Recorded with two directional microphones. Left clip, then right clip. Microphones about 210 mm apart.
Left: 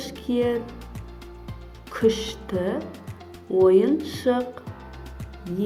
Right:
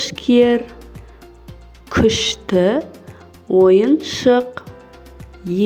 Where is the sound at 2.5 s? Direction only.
35° right (ahead or behind).